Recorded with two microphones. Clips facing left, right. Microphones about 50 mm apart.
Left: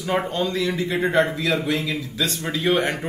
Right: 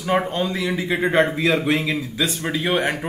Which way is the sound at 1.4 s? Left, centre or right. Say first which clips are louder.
Right 3 dB; right.